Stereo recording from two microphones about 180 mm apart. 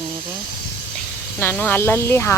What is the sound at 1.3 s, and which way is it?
Speech, 10° left (ahead or behind).